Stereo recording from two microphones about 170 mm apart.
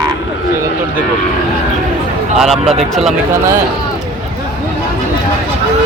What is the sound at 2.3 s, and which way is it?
Speech, centre (ahead or behind).